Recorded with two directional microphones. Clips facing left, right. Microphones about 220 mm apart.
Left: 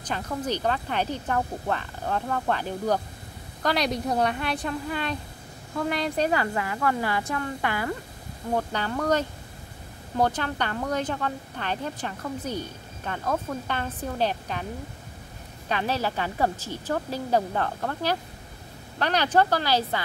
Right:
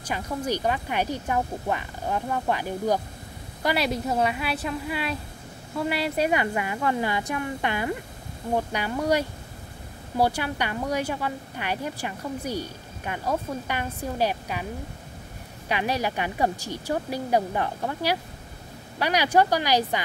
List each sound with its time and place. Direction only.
0.0 s a woman's voice: 10° right (ahead or behind)
6.3 s a woman's voice: 20° right (ahead or behind)
15.7 s a woman's voice: 15° right (ahead or behind)